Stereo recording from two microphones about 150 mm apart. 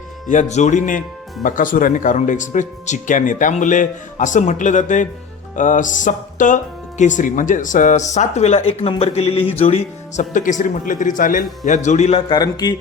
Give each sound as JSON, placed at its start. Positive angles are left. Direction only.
{"t": 0.3, "sound": "speech", "side_deg": 50}
{"t": 12.3, "sound": "speech", "side_deg": 25}